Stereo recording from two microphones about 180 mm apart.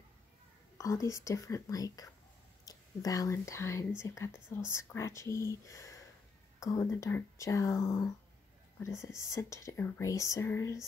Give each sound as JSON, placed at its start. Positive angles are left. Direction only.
{"t": 0.7, "sound": "speech", "side_deg": 20}